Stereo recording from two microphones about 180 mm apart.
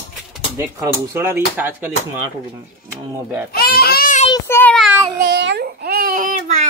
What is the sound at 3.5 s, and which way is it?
Speech, 55° left (ahead or behind).